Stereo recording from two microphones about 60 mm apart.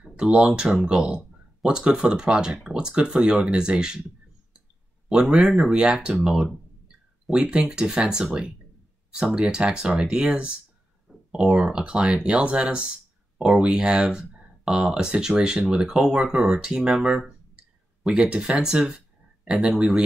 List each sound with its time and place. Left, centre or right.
0.0 s speech: centre
5.1 s speech: centre
11.1 s a sound: left
11.4 s speech: centre
18.2 s speech: centre